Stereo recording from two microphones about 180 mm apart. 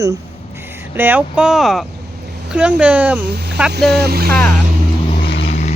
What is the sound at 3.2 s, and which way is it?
Speech, 65° right (ahead or behind).